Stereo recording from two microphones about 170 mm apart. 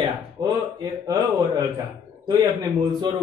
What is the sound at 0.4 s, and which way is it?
Speech, 25° right (ahead or behind).